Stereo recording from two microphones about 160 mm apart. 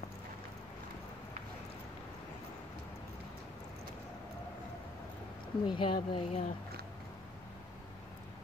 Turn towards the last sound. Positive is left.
turn(degrees=45)  # may be behind; listen again after turning